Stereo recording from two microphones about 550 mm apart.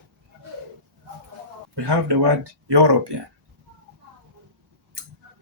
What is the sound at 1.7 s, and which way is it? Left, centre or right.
Speech, right.